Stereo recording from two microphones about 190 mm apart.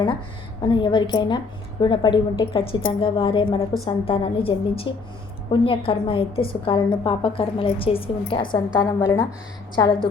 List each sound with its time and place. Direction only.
0.6 s a woman's voice: 25° left (ahead or behind)